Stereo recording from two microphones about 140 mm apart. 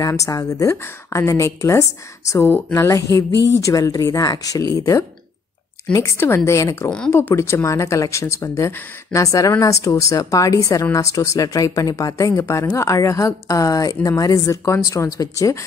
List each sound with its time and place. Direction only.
0.0 s speech: 25° left (ahead or behind)